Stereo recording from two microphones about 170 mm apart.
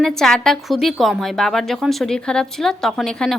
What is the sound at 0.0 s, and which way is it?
A woman's voice, 5° left (ahead or behind).